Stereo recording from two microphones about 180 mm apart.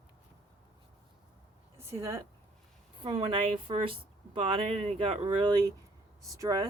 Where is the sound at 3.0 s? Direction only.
30° right (ahead or behind).